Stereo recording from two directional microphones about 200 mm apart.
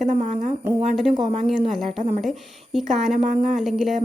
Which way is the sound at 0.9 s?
Centre (ahead or behind).